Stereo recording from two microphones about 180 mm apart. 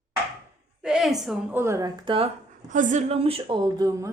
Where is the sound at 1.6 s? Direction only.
15° right (ahead or behind).